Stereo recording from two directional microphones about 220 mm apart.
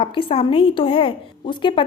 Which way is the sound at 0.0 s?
25° left (ahead or behind).